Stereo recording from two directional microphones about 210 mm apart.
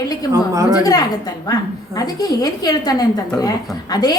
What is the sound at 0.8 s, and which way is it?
A woman's voice, 20° left (ahead or behind).